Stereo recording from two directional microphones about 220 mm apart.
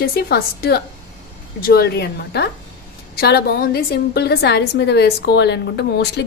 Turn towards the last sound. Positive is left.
turn(degrees=50)  # may be behind; listen again after turning